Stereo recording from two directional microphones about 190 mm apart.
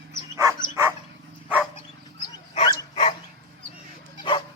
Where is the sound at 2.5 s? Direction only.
30° left (ahead or behind).